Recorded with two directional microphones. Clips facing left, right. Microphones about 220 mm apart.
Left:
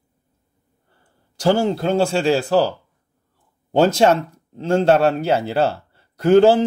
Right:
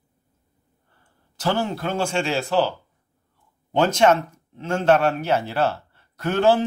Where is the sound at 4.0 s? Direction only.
35° left (ahead or behind).